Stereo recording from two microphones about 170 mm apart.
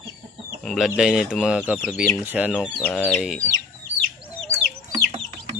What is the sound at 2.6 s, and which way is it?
Speech, 10° left (ahead or behind).